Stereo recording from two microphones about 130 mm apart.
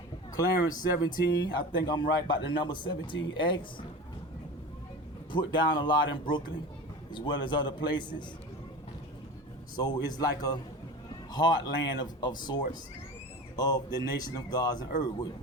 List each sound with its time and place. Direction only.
0.3 s speech: 30° left (ahead or behind)
5.3 s speech: 35° left (ahead or behind)
7.1 s speech: 35° left (ahead or behind)
9.7 s speech: 30° left (ahead or behind)
13.6 s speech: 30° left (ahead or behind)